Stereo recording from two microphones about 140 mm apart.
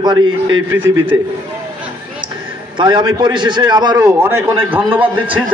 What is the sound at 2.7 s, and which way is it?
A man's voice, 35° right (ahead or behind).